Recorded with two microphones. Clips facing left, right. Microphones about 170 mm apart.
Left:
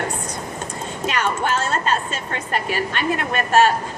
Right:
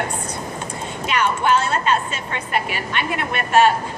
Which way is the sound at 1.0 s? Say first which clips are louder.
Right 3 dB; 45° left (ahead or behind).